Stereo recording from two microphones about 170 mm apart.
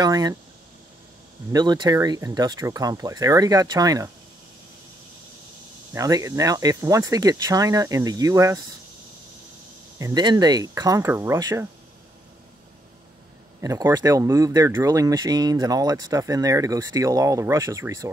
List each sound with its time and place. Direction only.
0.0 s speech: 20° right (ahead or behind)
1.5 s speech: 25° right (ahead or behind)
5.9 s speech: 20° right (ahead or behind)
9.9 s speech: 20° right (ahead or behind)
13.6 s speech: 20° right (ahead or behind)